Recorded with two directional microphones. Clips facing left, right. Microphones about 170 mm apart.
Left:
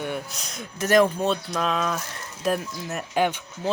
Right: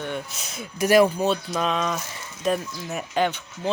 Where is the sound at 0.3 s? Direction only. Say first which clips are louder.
Even; centre (ahead or behind).